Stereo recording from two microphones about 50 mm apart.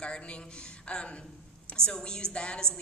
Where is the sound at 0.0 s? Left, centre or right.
Left.